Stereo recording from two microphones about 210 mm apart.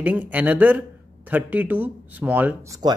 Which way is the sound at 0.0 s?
5° right (ahead or behind).